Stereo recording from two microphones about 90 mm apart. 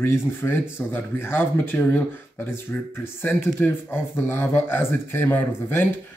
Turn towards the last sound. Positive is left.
turn(degrees=25)  # may be behind; listen again after turning